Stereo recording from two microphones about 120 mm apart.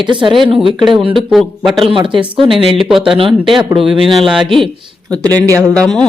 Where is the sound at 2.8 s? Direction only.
5° right (ahead or behind).